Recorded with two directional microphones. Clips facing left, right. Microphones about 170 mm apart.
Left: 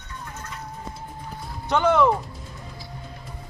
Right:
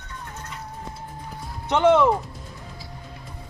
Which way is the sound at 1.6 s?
25° right (ahead or behind).